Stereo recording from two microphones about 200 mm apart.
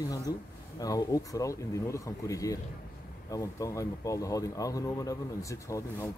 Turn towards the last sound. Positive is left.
turn(degrees=15)  # may be behind; listen again after turning